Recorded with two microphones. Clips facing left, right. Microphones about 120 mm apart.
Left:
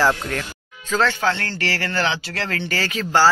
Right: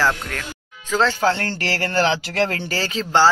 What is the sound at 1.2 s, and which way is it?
Speech, 40° right (ahead or behind).